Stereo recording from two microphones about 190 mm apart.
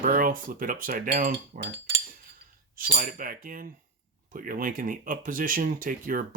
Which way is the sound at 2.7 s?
45° right (ahead or behind).